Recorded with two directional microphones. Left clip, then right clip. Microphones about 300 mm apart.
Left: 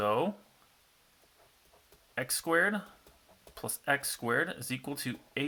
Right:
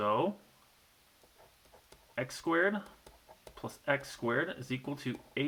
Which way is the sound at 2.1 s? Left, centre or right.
Left.